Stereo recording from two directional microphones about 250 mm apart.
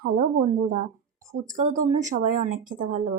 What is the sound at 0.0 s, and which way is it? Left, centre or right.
Speech, right.